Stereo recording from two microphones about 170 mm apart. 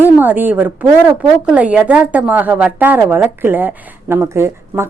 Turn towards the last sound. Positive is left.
turn(degrees=-15)  # may be behind; listen again after turning